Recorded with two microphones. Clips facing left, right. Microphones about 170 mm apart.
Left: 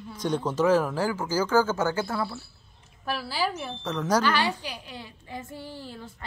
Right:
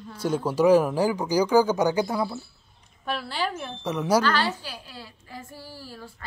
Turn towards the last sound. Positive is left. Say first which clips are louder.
# left 2 dB
turn(degrees=20)  # may be behind; listen again after turning